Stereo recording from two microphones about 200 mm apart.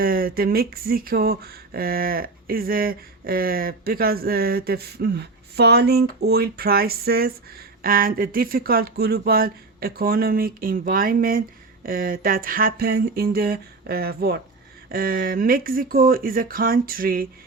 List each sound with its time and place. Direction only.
0.0 s speech: 45° right (ahead or behind)